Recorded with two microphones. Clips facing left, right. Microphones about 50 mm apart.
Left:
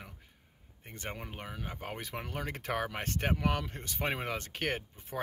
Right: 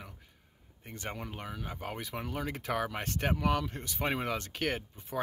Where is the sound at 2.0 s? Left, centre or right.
Left.